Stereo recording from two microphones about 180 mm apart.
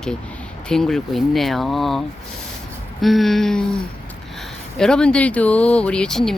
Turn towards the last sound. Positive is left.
turn(degrees=0)  # may be behind; listen again after turning